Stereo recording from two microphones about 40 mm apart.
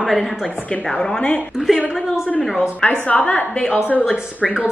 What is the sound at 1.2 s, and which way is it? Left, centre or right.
Speech, left.